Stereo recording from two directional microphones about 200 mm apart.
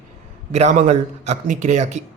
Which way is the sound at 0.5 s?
35° right (ahead or behind).